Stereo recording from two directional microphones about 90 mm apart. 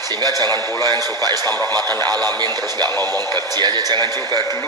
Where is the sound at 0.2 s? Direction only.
45° right (ahead or behind).